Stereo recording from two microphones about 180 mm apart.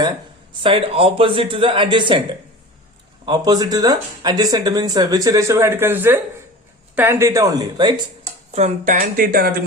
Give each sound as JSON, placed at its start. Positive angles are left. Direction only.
{"t": 0.6, "sound": "speech", "side_deg": -30}
{"t": 3.2, "sound": "speech", "side_deg": -25}
{"t": 8.2, "sound": "speech", "side_deg": -40}